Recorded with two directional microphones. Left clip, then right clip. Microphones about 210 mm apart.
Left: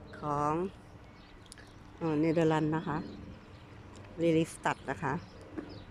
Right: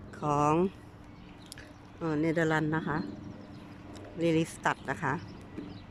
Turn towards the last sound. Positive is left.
turn(degrees=5)  # may be behind; listen again after turning